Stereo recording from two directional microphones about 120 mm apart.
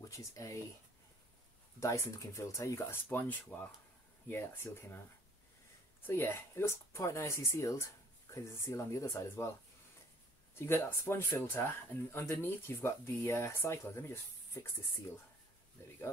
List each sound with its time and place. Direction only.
0.1 s speech: 25° left (ahead or behind)
1.8 s speech: 25° left (ahead or behind)
6.0 s speech: 20° left (ahead or behind)
10.5 s speech: 20° left (ahead or behind)
15.8 s speech: 20° left (ahead or behind)